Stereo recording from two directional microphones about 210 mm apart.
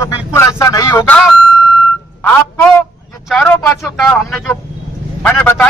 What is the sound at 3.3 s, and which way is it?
Speech, 5° left (ahead or behind).